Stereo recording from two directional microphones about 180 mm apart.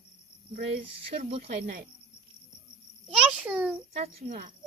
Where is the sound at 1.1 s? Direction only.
35° right (ahead or behind).